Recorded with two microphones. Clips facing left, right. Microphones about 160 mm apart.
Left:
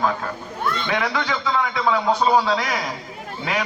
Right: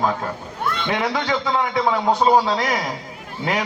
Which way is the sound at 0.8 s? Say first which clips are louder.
Right 3 dB; 20° right (ahead or behind).